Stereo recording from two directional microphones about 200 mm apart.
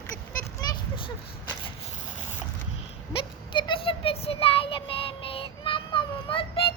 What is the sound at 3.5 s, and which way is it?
Child singing, 25° left (ahead or behind).